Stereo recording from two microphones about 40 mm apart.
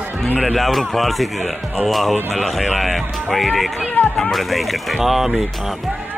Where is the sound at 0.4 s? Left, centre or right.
Centre.